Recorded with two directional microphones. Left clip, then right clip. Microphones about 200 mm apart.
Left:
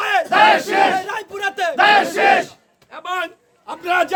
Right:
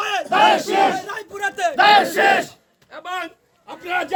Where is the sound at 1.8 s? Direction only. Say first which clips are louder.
Even; 25° right (ahead or behind).